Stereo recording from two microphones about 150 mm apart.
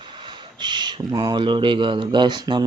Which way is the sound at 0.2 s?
30° right (ahead or behind).